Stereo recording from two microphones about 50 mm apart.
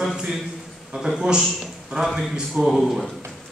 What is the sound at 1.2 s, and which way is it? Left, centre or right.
A man's voice, centre.